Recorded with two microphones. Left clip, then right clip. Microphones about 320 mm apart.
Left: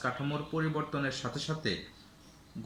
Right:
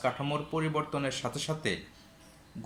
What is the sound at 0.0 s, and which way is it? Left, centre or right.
Speech, right.